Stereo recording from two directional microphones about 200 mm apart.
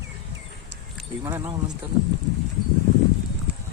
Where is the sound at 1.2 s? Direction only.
15° right (ahead or behind).